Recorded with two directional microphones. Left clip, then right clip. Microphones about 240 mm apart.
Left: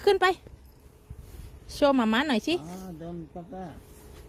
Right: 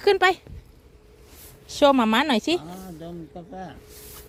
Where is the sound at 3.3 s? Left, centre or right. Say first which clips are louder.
Right 2 dB; right.